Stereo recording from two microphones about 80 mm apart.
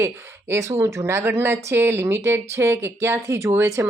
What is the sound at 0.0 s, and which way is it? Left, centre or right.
Speech, right.